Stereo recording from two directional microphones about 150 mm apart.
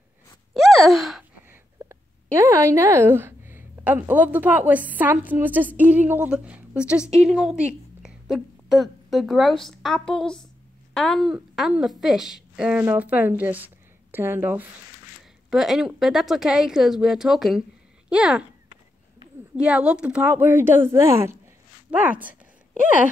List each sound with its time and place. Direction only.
0.6 s gasp: centre (ahead or behind)
1.5 s a sound: 20° right (ahead or behind)
2.3 s a woman's voice: 20° right (ahead or behind)
15.5 s a woman's voice: centre (ahead or behind)
19.5 s speech: 5° right (ahead or behind)